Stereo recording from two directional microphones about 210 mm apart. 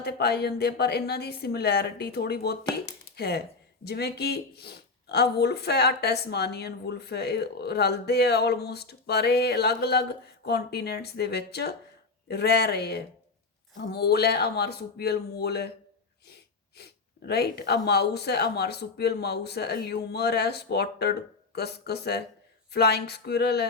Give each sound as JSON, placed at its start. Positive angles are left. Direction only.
{"t": 0.0, "sound": "speech", "side_deg": 50}
{"t": 16.7, "sound": "speech", "side_deg": 50}